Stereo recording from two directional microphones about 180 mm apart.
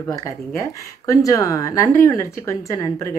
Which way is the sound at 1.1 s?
20° left (ahead or behind).